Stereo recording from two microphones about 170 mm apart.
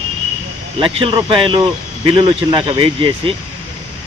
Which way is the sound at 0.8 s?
30° right (ahead or behind).